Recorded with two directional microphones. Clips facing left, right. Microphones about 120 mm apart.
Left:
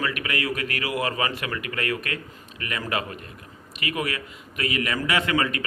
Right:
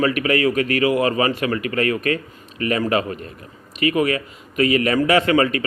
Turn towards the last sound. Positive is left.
turn(degrees=-30)  # may be behind; listen again after turning